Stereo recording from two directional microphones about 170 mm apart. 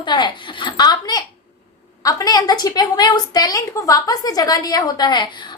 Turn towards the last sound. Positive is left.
turn(degrees=25)  # may be behind; listen again after turning